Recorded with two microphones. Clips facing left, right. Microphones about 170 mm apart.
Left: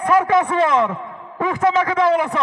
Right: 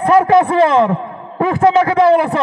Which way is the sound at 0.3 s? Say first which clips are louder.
Right 6 dB; 45° right (ahead or behind).